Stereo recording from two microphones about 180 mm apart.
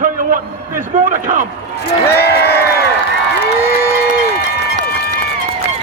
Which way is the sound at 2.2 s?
65° left (ahead or behind).